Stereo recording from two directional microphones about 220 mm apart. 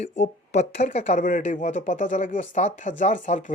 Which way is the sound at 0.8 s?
30° left (ahead or behind).